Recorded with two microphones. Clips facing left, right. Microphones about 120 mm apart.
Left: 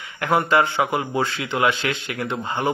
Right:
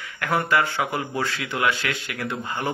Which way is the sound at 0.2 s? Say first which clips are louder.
Left 4 dB; 20° left (ahead or behind).